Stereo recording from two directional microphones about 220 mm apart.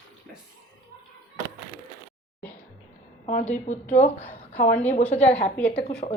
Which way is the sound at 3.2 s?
30° left (ahead or behind).